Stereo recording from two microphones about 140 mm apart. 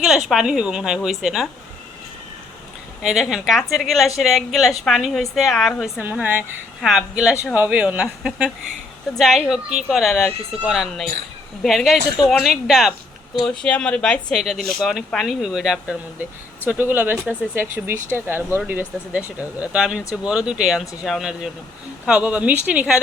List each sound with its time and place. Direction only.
0.0 s speech: centre (ahead or behind)
3.0 s speech: 5° right (ahead or behind)
6.0 s speech: 10° right (ahead or behind)
16.6 s speech: 15° right (ahead or behind)